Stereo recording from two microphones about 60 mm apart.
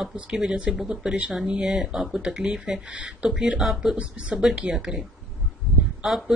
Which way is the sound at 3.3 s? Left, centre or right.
Centre.